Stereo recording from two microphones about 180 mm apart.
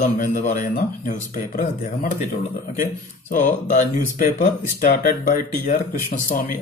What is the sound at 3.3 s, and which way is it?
A man's voice, 45° left (ahead or behind).